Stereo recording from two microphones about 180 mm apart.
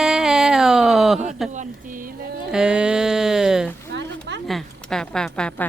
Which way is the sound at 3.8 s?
75° right (ahead or behind).